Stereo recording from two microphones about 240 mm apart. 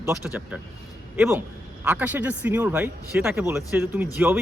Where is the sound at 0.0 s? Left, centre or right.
Centre.